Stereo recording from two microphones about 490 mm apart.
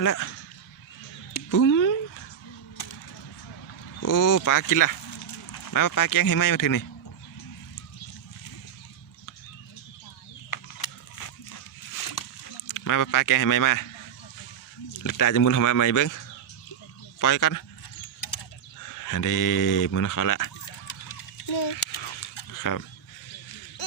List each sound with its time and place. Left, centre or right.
0.0 s speech: left
1.3 s a sound: left
4.0 s speech: left
10.5 s a sound: left
12.6 s speech: left
15.0 s speech: left
17.2 s speech: left
18.9 s speech: left
21.5 s speech: left
22.5 s speech: left